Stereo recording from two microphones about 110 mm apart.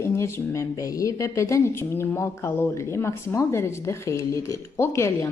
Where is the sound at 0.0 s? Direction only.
25° left (ahead or behind).